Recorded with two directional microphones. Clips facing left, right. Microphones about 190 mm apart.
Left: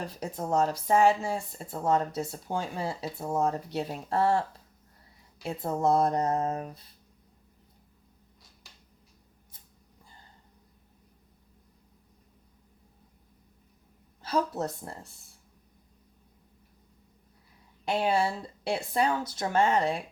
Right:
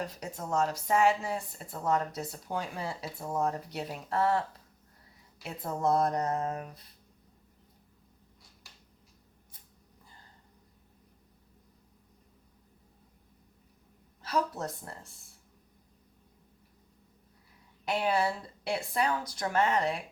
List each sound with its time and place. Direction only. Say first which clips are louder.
0.0 s speech: left 3 dB; 30° left (ahead or behind)
14.2 s speech: left 3 dB; 25° left (ahead or behind)
17.8 s speech: left 2 dB; 30° left (ahead or behind)